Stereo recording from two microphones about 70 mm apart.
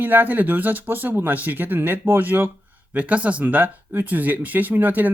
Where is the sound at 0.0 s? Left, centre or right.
Right.